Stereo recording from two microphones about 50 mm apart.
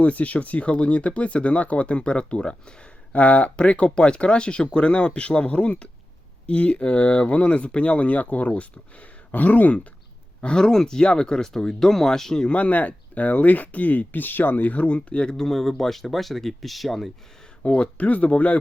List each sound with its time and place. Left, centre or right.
0.0 s speech: left
3.1 s speech: left
10.4 s speech: centre
12.5 s speech: left
15.4 s speech: centre
17.6 s speech: left